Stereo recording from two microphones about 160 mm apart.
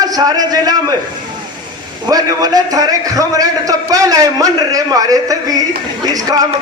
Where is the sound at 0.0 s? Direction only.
25° right (ahead or behind).